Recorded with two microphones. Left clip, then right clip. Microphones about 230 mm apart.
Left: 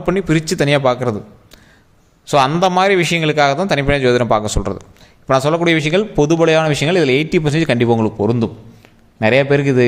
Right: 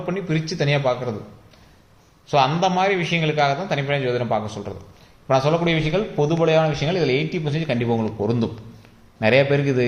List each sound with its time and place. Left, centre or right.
0.0 s a man's voice: left
2.2 s a man's voice: left